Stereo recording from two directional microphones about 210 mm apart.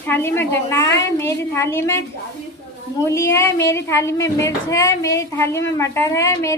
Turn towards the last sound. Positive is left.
turn(degrees=15)  # may be behind; listen again after turning